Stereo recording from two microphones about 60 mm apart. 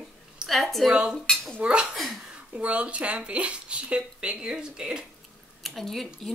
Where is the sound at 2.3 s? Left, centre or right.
Right.